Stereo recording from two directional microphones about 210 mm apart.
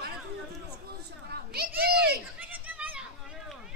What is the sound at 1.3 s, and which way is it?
Children playing, 50° right (ahead or behind).